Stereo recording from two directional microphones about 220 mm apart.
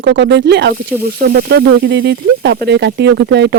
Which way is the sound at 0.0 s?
55° right (ahead or behind).